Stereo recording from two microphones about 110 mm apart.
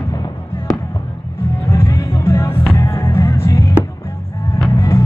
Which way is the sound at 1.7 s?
25° left (ahead or behind).